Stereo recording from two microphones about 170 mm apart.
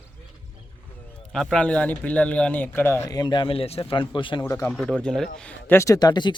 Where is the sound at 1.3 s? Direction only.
5° left (ahead or behind); by 4.4 s 30° left (ahead or behind).